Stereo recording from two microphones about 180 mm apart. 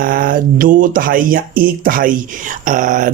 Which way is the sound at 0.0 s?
50° right (ahead or behind).